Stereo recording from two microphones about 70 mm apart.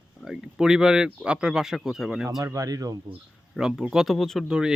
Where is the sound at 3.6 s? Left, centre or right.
Centre.